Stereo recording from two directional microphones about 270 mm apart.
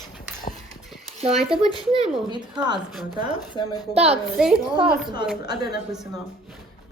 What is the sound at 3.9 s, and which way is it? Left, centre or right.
Speech, right.